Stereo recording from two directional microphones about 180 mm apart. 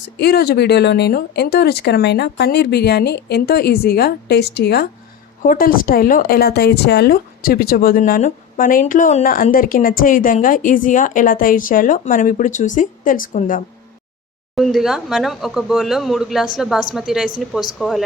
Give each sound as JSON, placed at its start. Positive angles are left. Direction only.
{"t": 0.2, "sound": "speech", "side_deg": 60}
{"t": 5.4, "sound": "a woman's voice", "side_deg": 50}
{"t": 14.5, "sound": "speech", "side_deg": 0}